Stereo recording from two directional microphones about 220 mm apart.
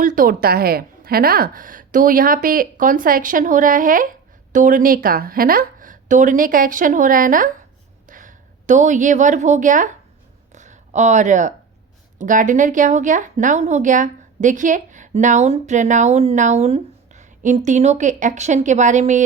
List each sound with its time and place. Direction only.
0.0 s a woman's voice: 40° right (ahead or behind)
10.5 s a sound: 35° right (ahead or behind)
12.2 s a woman's voice: 35° right (ahead or behind)